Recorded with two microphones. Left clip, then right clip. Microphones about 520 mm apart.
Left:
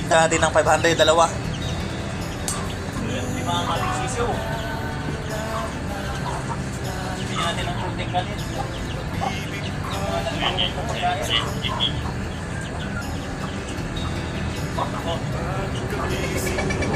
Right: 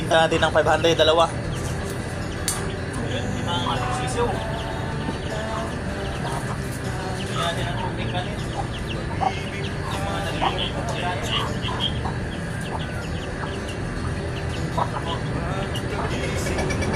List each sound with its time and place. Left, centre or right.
0.1 s speech: right